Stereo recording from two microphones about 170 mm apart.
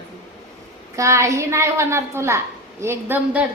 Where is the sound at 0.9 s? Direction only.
15° right (ahead or behind).